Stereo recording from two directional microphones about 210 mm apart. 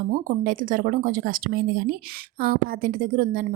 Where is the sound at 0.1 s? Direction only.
40° right (ahead or behind).